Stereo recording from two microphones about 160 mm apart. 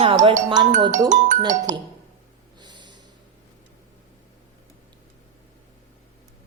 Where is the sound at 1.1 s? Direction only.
50° right (ahead or behind).